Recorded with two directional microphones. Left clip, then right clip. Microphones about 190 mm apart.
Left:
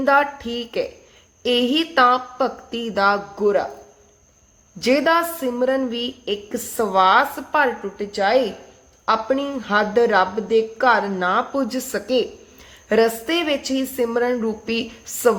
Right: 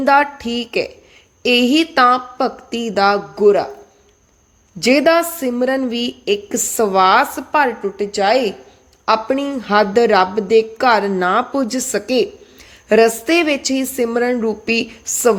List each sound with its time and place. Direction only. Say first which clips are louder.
0.0 s a woman's voice: right 4 dB; 25° right (ahead or behind)
4.8 s a woman's voice: right 4 dB; 30° right (ahead or behind)